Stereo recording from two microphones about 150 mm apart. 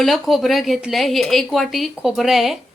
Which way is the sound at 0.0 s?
Centre (ahead or behind).